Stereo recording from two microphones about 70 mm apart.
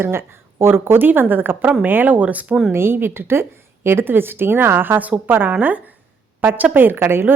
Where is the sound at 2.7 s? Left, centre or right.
Right.